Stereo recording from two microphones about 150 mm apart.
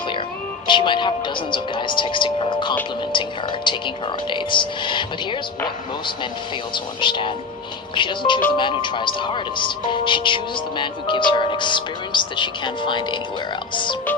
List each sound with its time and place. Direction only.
0.7 s speech: 30° left (ahead or behind)
6.7 s speech: 30° left (ahead or behind)